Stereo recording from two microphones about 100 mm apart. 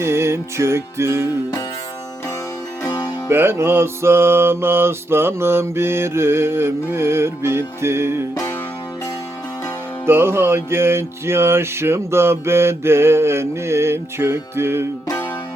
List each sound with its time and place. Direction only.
0.0 s music: 25° right (ahead or behind)
3.2 s music: 25° right (ahead or behind)
10.1 s music: 25° right (ahead or behind)